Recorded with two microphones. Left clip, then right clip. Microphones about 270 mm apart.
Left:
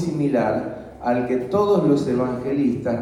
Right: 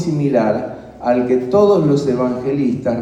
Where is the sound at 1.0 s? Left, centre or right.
Right.